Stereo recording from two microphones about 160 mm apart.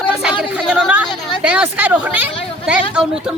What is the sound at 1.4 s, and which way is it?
Speech, 10° right (ahead or behind).